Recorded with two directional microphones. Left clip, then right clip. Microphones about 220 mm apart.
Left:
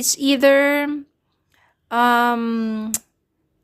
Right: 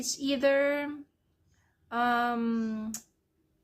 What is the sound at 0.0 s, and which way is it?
A woman's voice, 45° left (ahead or behind).